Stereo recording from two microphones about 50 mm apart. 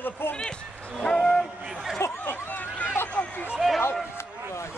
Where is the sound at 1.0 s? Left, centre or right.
Centre.